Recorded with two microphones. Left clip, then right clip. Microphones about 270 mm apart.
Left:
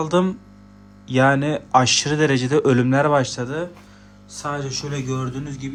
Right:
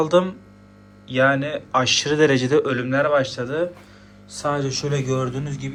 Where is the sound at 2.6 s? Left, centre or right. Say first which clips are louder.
Left 3 dB; left.